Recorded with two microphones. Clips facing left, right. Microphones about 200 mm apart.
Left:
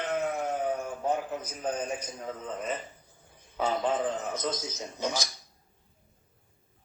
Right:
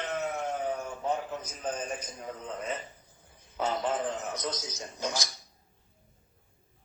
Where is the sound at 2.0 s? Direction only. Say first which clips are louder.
Left 2 dB; 5° left (ahead or behind).